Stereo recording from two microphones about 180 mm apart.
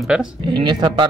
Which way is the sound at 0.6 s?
25° right (ahead or behind).